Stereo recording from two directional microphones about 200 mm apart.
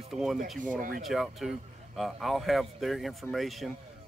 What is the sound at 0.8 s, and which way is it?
Speech, 45° right (ahead or behind).